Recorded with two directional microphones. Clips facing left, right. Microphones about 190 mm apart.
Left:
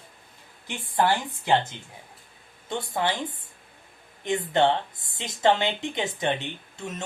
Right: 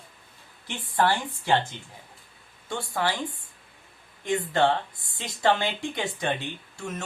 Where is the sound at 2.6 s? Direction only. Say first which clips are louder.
Left 1 dB; 20° left (ahead or behind).